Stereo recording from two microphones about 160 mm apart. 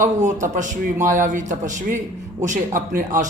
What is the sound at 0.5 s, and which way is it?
A man's voice, 55° right (ahead or behind).